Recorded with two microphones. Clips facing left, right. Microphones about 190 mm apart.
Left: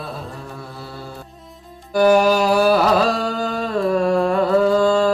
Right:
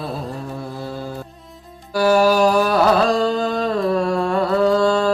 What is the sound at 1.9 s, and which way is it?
Music, 20° left (ahead or behind).